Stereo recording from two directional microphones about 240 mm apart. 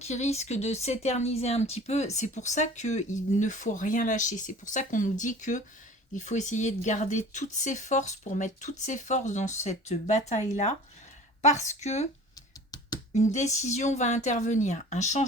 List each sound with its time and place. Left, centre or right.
0.0 s speech: left
13.1 s speech: left